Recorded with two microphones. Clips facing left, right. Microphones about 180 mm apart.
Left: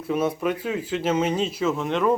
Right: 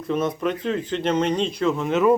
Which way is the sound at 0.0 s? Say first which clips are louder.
Even; 10° left (ahead or behind).